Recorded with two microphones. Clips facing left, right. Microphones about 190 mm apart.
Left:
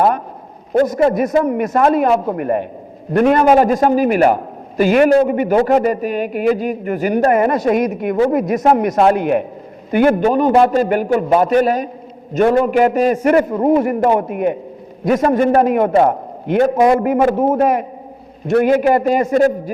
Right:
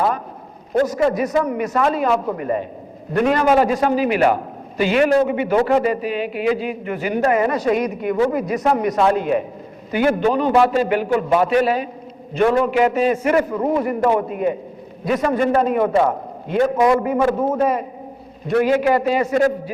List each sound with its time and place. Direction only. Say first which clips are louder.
0.9 s a man's voice: left 4 dB; 50° left (ahead or behind)